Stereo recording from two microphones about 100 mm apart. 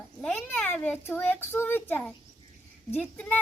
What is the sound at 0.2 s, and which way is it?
Speech, 10° left (ahead or behind).